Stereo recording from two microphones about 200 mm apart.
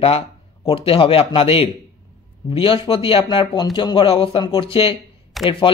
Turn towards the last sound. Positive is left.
turn(degrees=0)  # may be behind; listen again after turning